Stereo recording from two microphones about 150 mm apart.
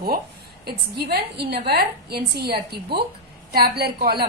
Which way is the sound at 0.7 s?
90° right.